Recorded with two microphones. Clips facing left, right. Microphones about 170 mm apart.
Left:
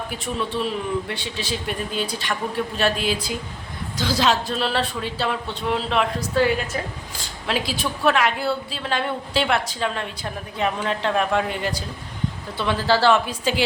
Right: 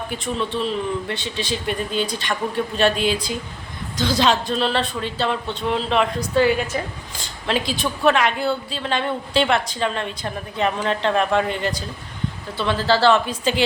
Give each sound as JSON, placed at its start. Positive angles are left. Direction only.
{"t": 0.3, "sound": "a woman's voice", "side_deg": 10}